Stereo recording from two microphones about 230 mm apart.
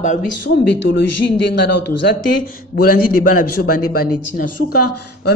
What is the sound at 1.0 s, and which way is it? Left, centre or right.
A man's voice, left.